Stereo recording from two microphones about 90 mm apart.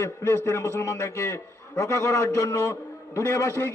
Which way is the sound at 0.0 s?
30° left (ahead or behind).